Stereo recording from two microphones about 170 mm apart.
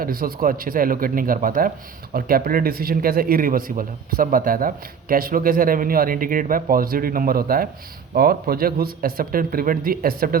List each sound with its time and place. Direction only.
0.0 s speech: 60° right (ahead or behind)